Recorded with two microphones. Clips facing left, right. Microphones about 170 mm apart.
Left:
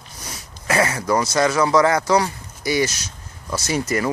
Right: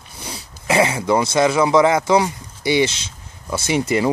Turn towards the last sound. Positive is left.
turn(degrees=-20)  # may be behind; listen again after turning